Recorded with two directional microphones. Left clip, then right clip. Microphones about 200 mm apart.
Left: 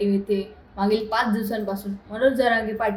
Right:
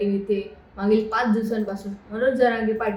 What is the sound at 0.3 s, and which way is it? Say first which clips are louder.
Speech: even; 45° left (ahead or behind).